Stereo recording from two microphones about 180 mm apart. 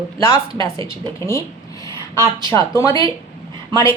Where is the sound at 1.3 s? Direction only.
15° left (ahead or behind).